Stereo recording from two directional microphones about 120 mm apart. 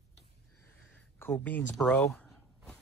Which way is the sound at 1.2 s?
15° left (ahead or behind).